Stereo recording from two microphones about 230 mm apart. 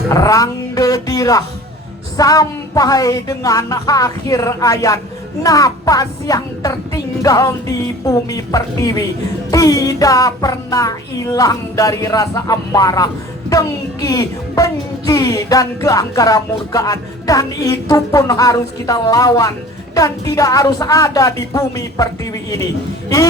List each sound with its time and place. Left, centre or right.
0.1 s music: centre